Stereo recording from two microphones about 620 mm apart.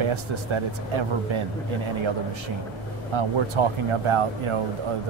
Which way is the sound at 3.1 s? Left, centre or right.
Right.